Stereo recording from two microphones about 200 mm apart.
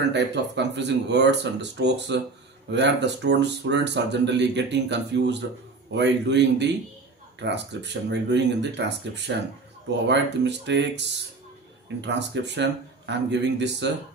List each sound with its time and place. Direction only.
0.1 s speech: 60° right (ahead or behind)
12.0 s speech: 60° right (ahead or behind)